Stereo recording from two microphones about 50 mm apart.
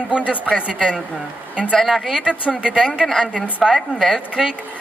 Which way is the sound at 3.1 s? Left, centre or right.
Centre.